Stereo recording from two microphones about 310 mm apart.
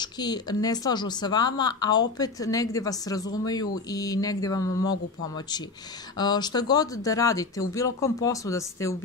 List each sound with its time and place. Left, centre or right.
0.0 s a woman's voice: centre
6.1 s a woman's voice: centre